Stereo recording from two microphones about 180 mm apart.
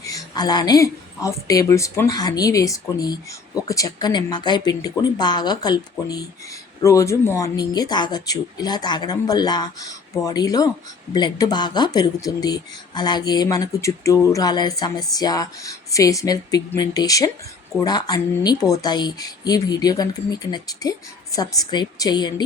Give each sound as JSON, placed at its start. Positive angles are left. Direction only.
{"t": 0.0, "sound": "speech", "side_deg": 20}